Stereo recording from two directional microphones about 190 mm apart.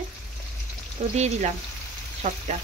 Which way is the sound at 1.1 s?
35° right (ahead or behind).